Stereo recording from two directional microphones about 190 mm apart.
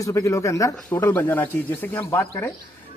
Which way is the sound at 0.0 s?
15° left (ahead or behind).